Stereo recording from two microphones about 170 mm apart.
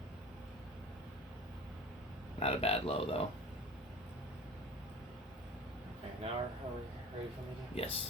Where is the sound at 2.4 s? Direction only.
35° left (ahead or behind).